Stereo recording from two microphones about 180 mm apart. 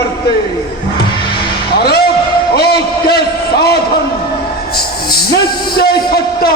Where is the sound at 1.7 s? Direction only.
60° left (ahead or behind).